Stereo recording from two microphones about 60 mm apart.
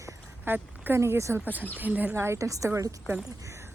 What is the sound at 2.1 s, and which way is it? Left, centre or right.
Speech, right.